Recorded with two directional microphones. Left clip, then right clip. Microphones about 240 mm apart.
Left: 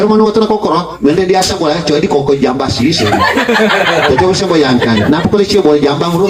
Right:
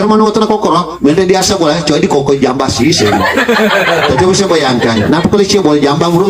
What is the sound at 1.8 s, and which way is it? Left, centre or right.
A man's voice, right.